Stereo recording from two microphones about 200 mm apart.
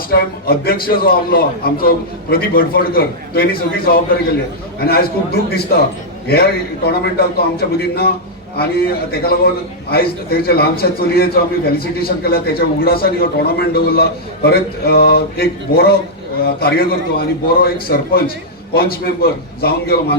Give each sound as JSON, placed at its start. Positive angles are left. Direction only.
{"t": 0.1, "sound": "a man's voice", "side_deg": 50}